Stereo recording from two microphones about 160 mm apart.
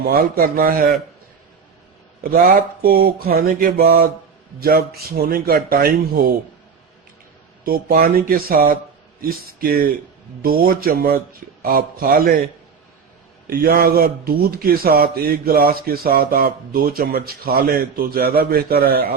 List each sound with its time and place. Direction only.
0.0 s a man's voice: 70° right (ahead or behind)
2.3 s a man's voice: 65° right (ahead or behind)
7.6 s a man's voice: 65° right (ahead or behind)
13.5 s a man's voice: 70° right (ahead or behind)